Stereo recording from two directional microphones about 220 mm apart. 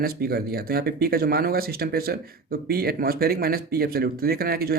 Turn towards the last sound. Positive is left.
turn(degrees=-45)  # may be behind; listen again after turning